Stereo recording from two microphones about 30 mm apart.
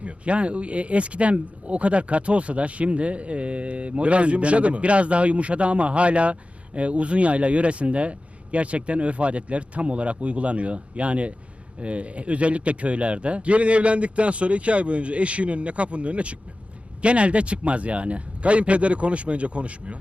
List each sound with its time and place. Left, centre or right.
0.0 s speech: right